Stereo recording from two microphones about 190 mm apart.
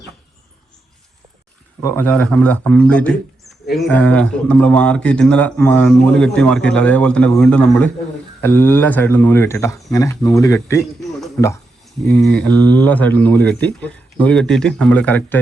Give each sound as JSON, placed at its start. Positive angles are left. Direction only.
{"t": 1.8, "sound": "speech", "side_deg": 10}